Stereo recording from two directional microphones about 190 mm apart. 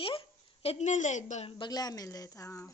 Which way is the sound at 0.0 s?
30° left (ahead or behind).